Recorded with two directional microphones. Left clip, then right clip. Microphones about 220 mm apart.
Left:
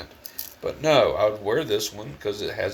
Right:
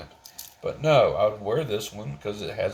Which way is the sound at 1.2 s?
15° left (ahead or behind).